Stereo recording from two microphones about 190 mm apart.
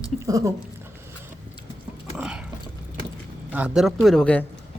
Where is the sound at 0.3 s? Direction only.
15° right (ahead or behind).